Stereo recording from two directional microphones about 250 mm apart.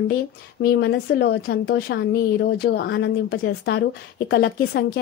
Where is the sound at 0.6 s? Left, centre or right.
Left.